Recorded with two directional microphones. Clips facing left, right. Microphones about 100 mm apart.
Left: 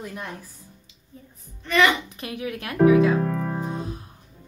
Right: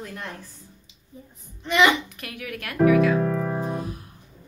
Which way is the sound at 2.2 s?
25° left (ahead or behind).